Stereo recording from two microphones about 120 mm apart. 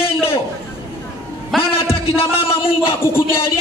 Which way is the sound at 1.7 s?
50° left (ahead or behind).